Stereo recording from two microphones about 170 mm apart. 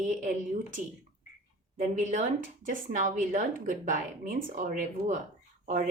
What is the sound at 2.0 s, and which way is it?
A woman's voice, 45° right (ahead or behind).